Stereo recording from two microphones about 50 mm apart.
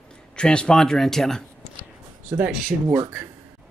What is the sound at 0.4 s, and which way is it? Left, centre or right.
Speech, centre.